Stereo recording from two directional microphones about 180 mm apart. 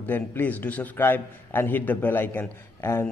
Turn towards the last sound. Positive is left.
turn(degrees=15)  # may be behind; listen again after turning